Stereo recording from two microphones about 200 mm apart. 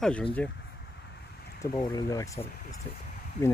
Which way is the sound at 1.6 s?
20° left (ahead or behind).